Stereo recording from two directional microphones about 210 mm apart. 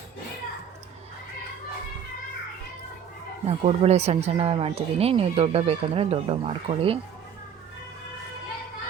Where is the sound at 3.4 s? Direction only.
30° right (ahead or behind).